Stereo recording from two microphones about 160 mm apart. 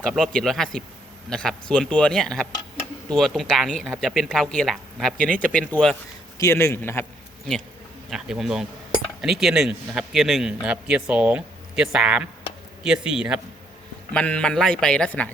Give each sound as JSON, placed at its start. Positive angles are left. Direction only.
{"t": 0.0, "sound": "a man's voice", "side_deg": 5}
{"t": 6.3, "sound": "a man's voice", "side_deg": 20}
{"t": 8.1, "sound": "a man's voice", "side_deg": -5}
{"t": 14.1, "sound": "a man's voice", "side_deg": 5}